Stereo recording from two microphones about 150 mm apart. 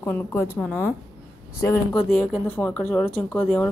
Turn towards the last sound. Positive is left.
turn(degrees=5)  # may be behind; listen again after turning